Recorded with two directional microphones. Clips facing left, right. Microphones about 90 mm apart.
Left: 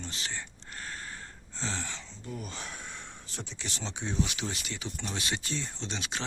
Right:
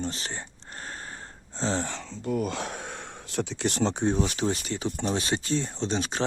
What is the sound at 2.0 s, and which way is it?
Speech, 65° right (ahead or behind).